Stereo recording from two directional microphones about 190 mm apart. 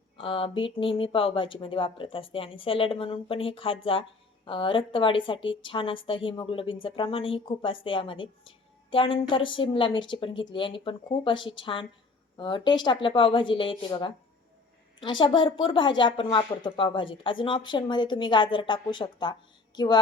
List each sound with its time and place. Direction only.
0.2 s speech: 30° left (ahead or behind)
15.2 s speech: 25° left (ahead or behind)